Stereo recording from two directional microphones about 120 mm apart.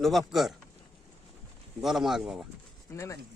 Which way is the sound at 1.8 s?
Centre (ahead or behind).